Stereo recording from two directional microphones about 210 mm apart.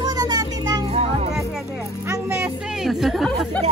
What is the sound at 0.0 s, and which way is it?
Children playing, 20° right (ahead or behind).